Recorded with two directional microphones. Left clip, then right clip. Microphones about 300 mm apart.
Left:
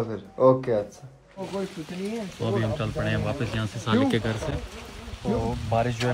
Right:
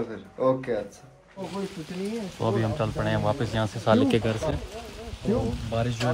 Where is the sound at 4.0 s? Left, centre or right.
Centre.